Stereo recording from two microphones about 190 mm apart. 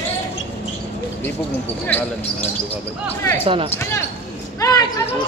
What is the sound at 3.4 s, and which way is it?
Speech, 30° right (ahead or behind).